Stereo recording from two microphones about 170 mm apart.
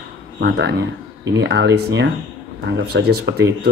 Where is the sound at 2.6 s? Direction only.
75° right (ahead or behind).